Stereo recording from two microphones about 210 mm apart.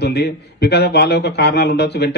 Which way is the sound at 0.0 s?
50° left (ahead or behind).